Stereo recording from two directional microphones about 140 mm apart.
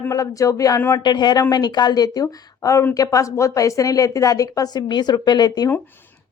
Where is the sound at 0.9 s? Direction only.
30° left (ahead or behind).